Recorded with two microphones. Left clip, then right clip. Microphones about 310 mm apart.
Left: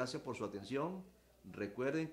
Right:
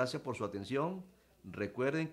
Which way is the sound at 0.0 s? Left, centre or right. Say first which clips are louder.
Right 5 dB; right.